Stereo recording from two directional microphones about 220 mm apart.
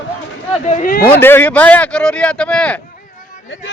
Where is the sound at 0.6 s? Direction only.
35° left (ahead or behind).